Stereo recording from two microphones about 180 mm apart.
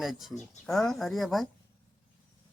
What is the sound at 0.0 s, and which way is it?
Speech, centre (ahead or behind).